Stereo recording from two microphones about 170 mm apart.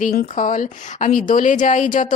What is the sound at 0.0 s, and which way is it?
A woman's voice, 50° left (ahead or behind).